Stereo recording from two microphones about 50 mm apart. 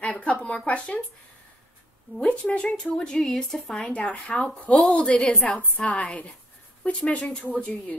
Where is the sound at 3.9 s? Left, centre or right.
Left.